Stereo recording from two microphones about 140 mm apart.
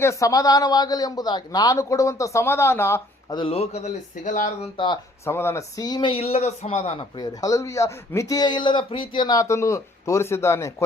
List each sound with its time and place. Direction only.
0.0 s speech: 20° left (ahead or behind)
3.2 s speech: 40° left (ahead or behind); by 4.7 s 65° left (ahead or behind)
5.2 s speech: 15° left (ahead or behind); by 7.1 s 50° left (ahead or behind)
7.2 s speech: 25° left (ahead or behind)